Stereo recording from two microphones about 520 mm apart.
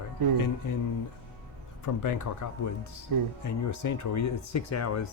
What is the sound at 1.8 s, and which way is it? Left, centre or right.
Speech, left.